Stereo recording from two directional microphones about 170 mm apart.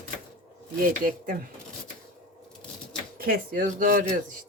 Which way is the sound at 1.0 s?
55° right (ahead or behind).